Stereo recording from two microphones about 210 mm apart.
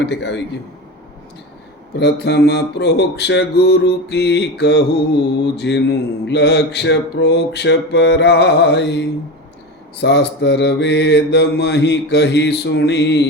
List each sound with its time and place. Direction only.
0.0 s mantra: 55° left (ahead or behind)
2.0 s a sound: 55° left (ahead or behind)
5.5 s mantra: 55° left (ahead or behind)